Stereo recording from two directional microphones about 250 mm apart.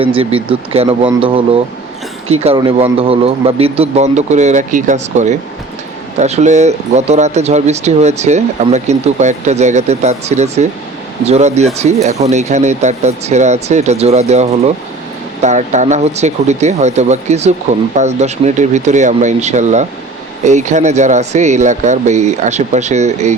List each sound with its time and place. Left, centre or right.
0.0 s speech: right